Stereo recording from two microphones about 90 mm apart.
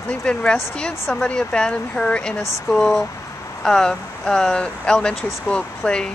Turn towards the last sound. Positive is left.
turn(degrees=10)  # may be behind; listen again after turning